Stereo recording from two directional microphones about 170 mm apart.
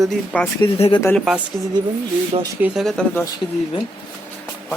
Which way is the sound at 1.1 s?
5° right (ahead or behind).